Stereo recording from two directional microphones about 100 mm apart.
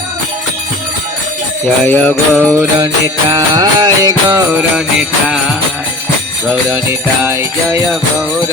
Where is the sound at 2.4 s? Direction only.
25° right (ahead or behind).